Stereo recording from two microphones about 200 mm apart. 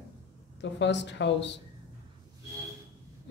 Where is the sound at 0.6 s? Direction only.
60° left (ahead or behind).